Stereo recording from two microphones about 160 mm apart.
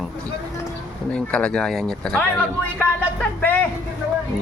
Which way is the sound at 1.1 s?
5° left (ahead or behind).